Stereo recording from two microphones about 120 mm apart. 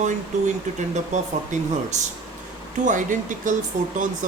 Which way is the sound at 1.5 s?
90° right.